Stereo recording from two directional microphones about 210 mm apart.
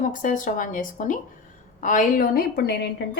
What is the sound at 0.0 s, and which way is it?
A woman's voice, 40° left (ahead or behind).